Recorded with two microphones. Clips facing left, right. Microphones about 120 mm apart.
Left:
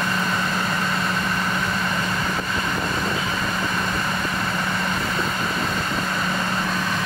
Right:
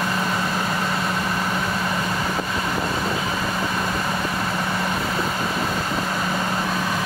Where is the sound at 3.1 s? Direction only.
30° right (ahead or behind).